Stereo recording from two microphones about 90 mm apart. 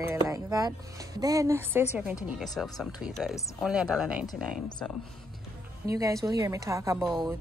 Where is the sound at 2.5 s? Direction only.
Centre (ahead or behind).